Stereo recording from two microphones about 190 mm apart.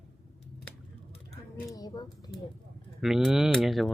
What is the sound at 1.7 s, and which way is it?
Speech, 20° left (ahead or behind).